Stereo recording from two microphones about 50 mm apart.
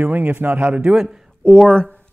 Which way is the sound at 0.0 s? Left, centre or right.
Right.